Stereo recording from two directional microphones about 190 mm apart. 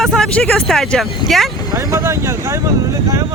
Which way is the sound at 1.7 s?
15° right (ahead or behind).